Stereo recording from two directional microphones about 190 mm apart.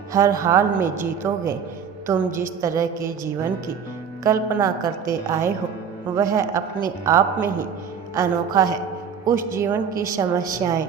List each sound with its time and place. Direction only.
0.1 s a woman's voice: 15° right (ahead or behind)
4.2 s a woman's voice: 10° right (ahead or behind)